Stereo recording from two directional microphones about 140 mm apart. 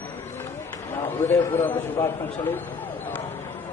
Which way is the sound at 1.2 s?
15° left (ahead or behind).